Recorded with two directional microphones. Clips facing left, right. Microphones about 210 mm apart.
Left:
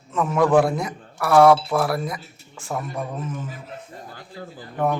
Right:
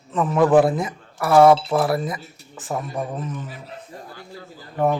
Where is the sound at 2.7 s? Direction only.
20° right (ahead or behind).